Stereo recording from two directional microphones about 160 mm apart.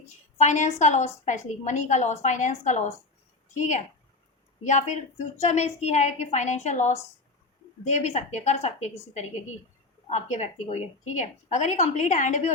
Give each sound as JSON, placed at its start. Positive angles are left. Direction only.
{"t": 0.3, "sound": "a woman's voice", "side_deg": 50}
{"t": 10.1, "sound": "a woman's voice", "side_deg": 50}